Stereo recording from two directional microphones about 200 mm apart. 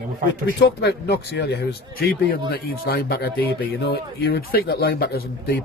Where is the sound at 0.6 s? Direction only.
55° left (ahead or behind).